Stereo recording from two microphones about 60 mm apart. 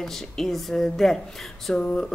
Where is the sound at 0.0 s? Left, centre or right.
Centre.